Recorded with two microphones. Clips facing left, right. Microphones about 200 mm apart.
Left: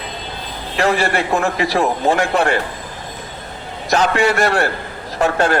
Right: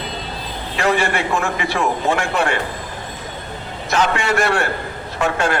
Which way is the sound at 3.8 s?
40° left (ahead or behind).